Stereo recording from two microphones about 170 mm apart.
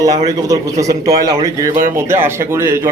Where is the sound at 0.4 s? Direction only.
20° right (ahead or behind).